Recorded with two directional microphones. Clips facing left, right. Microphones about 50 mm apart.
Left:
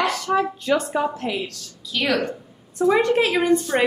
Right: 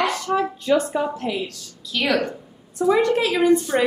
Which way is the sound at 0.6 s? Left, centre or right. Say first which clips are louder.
Right 1 dB; left.